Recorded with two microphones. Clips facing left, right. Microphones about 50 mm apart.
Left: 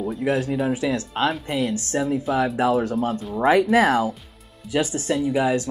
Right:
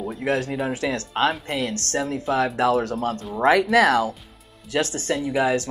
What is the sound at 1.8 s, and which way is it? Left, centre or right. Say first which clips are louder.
Speech: left 2 dB; centre.